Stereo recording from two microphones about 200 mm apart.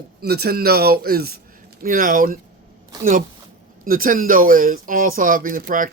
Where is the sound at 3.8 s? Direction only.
45° right (ahead or behind).